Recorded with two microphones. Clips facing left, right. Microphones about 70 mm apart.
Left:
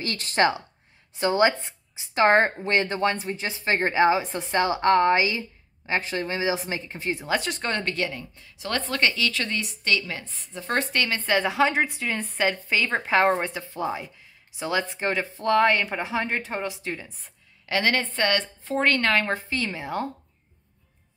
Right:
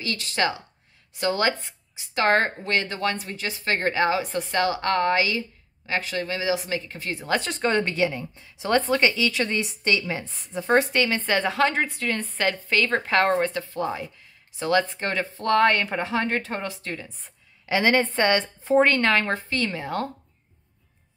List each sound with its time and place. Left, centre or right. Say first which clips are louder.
0.0 s speech: left 3 dB; left
1.1 s speech: left 3 dB; left
7.2 s speech: right 5 dB; centre
8.2 s speech: right 4 dB; right
8.8 s a woman's voice: right 3 dB; centre
9.4 s a woman's voice: right 4 dB; centre
17.6 s a woman's voice: right 3 dB; centre
18.9 s speech: right 1 dB; centre